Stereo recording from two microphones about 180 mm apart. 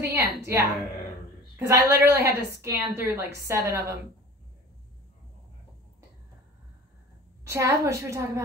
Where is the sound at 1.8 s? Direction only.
15° right (ahead or behind).